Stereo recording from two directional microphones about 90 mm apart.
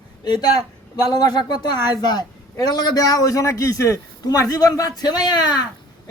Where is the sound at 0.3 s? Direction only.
50° left (ahead or behind).